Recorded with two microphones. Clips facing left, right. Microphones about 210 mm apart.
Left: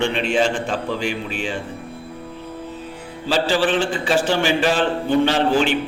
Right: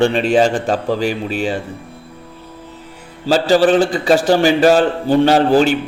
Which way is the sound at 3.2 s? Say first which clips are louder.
Right 7 dB; 40° right (ahead or behind).